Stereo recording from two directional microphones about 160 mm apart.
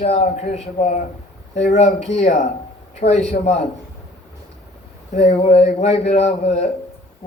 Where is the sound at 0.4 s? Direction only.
40° left (ahead or behind).